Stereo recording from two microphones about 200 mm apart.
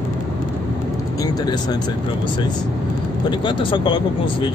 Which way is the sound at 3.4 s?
25° left (ahead or behind).